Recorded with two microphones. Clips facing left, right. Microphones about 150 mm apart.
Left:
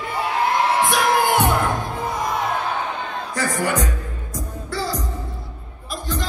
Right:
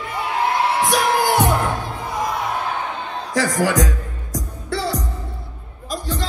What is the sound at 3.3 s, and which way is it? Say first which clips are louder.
Speech: right 4 dB; 90° right.